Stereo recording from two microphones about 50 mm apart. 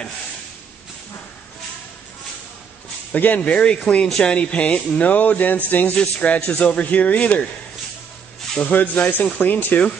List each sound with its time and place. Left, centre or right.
3.1 s speech: left
3.3 s speech: centre; by 5.9 s left
5.9 s speech: left
8.6 s speech: left